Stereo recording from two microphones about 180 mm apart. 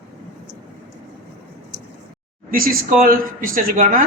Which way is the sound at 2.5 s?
50° right (ahead or behind).